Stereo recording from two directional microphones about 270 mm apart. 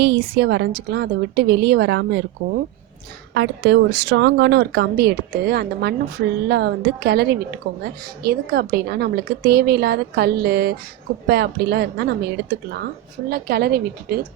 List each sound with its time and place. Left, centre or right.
0.0 s a woman's voice: right
3.3 s a woman's voice: right